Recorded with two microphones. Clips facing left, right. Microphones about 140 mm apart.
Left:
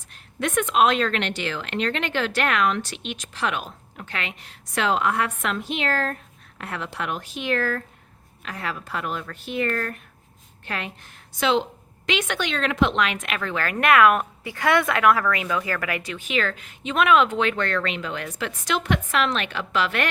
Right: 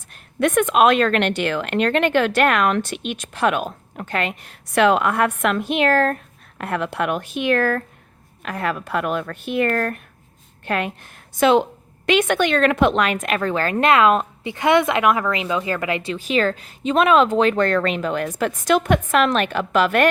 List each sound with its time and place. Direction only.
0.1 s a woman's voice: 55° right (ahead or behind)